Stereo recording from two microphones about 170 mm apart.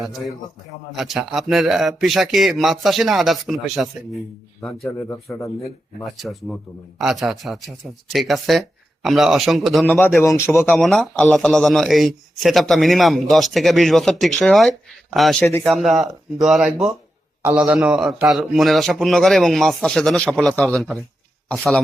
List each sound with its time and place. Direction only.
0.0 s a man's voice: centre (ahead or behind)
6.0 s a man's voice: centre (ahead or behind)
9.8 s speech: 10° left (ahead or behind)
10.7 s a man's voice: centre (ahead or behind)